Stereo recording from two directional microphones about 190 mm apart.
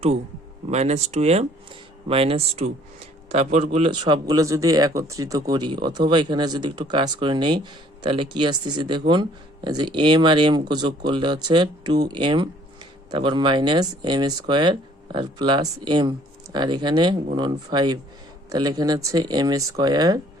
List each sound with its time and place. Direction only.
0.7 s a man's voice: 35° right (ahead or behind); by 20.2 s 20° right (ahead or behind)